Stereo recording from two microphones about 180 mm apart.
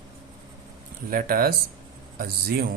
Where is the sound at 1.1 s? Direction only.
55° right (ahead or behind).